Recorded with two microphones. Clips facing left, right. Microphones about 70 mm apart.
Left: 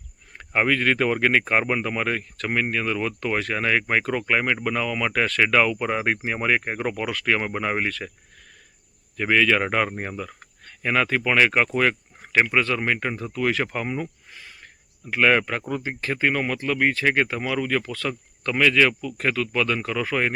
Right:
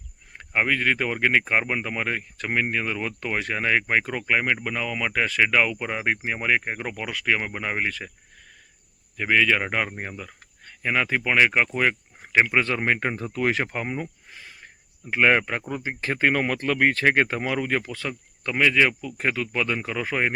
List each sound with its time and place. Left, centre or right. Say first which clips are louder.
0.3 s speech: left 2 dB; centre
12.6 s speech: even; right
13.7 s speech: left 2 dB; centre
17.8 s speech: left 3 dB; centre